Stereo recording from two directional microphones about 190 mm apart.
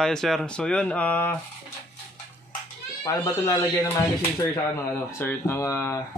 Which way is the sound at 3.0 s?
15° left (ahead or behind).